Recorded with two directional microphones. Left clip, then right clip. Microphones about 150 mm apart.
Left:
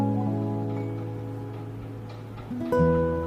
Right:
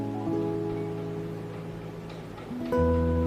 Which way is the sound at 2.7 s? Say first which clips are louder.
Left 3 dB; centre (ahead or behind).